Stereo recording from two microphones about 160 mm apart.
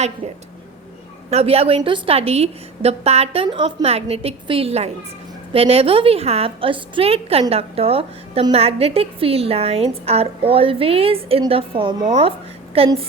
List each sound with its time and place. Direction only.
1.3 s a woman's voice: 40° right (ahead or behind)
12.0 s a woman's voice: 45° right (ahead or behind)